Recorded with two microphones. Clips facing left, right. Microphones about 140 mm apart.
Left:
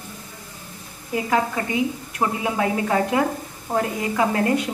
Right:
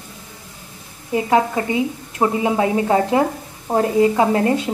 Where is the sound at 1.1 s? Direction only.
25° right (ahead or behind).